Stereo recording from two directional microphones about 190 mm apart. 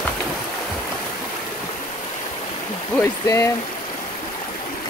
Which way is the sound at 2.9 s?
15° left (ahead or behind).